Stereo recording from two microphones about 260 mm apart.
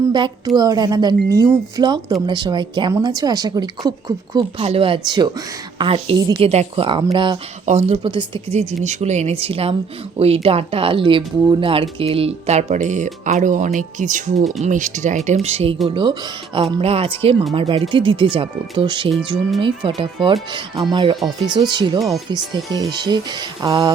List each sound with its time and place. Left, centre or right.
0.1 s a woman's voice: centre
20.2 s a woman's voice: centre